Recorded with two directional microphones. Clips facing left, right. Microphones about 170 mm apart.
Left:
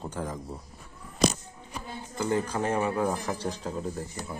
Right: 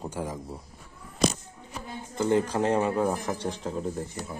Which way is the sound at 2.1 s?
20° right (ahead or behind).